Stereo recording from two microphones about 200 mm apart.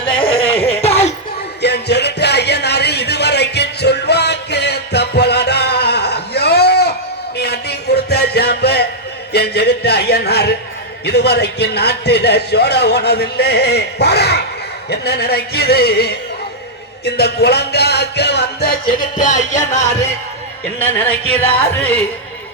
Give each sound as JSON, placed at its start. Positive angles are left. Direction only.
{"t": 0.0, "sound": "a sound", "side_deg": 25}
{"t": 0.7, "sound": "music", "side_deg": 30}
{"t": 1.6, "sound": "music", "side_deg": 55}
{"t": 9.3, "sound": "a sound", "side_deg": 55}
{"t": 11.0, "sound": "a man's voice", "side_deg": 55}
{"t": 17.1, "sound": "music", "side_deg": 55}
{"t": 19.8, "sound": "music", "side_deg": 15}
{"t": 21.7, "sound": "music", "side_deg": 10}